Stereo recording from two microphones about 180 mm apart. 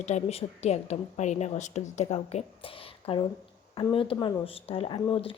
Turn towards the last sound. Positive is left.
turn(degrees=30)  # may be behind; listen again after turning